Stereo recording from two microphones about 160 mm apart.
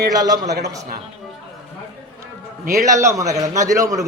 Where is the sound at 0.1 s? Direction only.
25° right (ahead or behind).